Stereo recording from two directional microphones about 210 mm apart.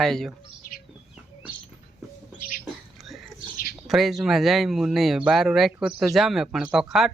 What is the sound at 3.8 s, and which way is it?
Speech, centre (ahead or behind).